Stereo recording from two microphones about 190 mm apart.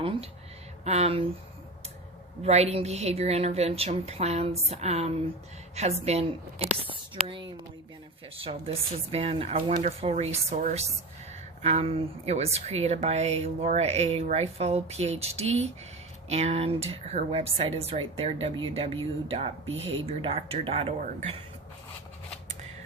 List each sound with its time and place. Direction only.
0.0 s speech: 30° right (ahead or behind)
2.4 s speech: 35° right (ahead or behind)